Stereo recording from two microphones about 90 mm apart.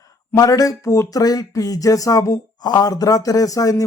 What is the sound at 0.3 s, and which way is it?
Speech, 40° left (ahead or behind).